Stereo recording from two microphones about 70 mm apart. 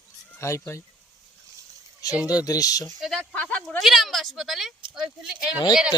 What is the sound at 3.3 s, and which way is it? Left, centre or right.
Speech, centre.